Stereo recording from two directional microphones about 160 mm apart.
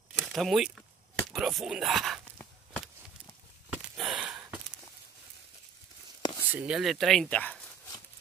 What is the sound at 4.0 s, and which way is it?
Sniff, 5° right (ahead or behind).